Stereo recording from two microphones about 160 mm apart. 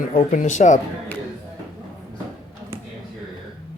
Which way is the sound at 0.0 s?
55° left (ahead or behind).